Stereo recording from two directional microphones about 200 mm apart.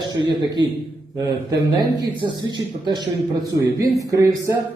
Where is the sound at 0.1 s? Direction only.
20° right (ahead or behind).